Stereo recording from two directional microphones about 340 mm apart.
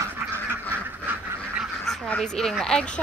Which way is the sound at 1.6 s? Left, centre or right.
Centre.